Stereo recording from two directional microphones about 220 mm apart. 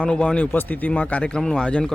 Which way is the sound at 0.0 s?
5° left (ahead or behind).